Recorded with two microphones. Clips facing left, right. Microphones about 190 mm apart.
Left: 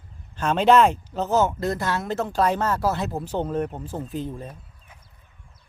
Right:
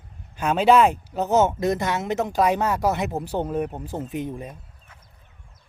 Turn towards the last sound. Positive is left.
turn(degrees=-15)  # may be behind; listen again after turning